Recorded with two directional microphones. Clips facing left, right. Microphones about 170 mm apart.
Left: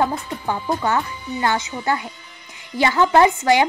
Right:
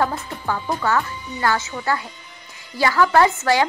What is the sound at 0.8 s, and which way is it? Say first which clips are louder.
Speech: even; 20° left (ahead or behind).